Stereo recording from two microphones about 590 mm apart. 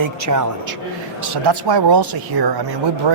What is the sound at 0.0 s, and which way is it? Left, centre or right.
Speech, right.